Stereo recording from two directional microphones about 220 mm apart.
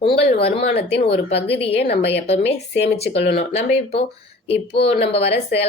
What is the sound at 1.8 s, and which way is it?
Speech, 50° left (ahead or behind).